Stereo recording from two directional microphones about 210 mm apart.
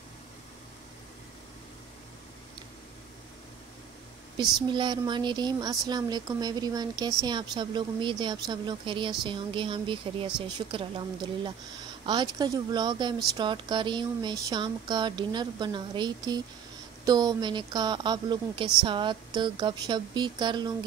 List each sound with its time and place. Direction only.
4.6 s speech: 20° right (ahead or behind)